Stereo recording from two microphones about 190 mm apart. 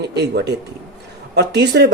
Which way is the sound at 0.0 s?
60° right (ahead or behind).